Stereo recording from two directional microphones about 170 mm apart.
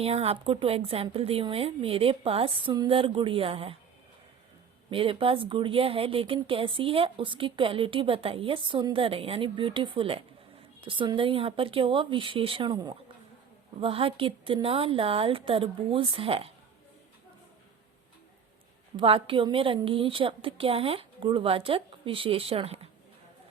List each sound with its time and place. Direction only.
0.0 s speech: 35° right (ahead or behind)
4.9 s speech: 30° right (ahead or behind)
18.9 s speech: 30° right (ahead or behind)